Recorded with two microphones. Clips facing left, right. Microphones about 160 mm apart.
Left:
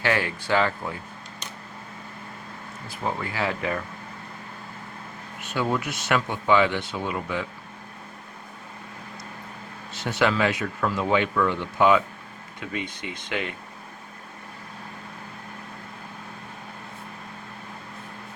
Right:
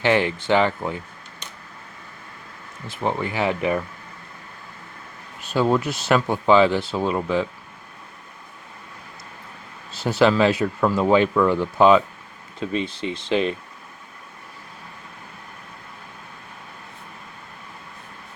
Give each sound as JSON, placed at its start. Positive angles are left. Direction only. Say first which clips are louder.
{"t": 0.0, "sound": "speech", "louder": "right 6 dB", "side_deg": -25}
{"t": 2.8, "sound": "speech", "louder": "right 5 dB", "side_deg": -25}
{"t": 5.4, "sound": "speech", "louder": "right 6 dB", "side_deg": -30}
{"t": 9.9, "sound": "speech", "louder": "right 6 dB", "side_deg": -30}